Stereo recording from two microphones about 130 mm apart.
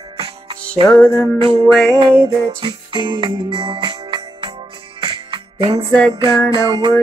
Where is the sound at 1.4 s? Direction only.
45° right (ahead or behind).